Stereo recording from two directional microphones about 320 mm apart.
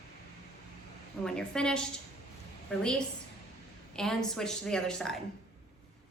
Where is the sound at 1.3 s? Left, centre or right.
Centre.